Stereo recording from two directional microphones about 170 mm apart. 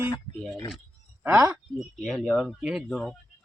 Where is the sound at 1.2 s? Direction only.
15° right (ahead or behind).